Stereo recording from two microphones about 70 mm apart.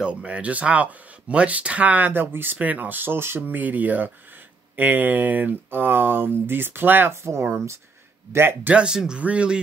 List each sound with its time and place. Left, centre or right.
0.0 s speech: centre
8.3 s speech: right
8.6 s speech: centre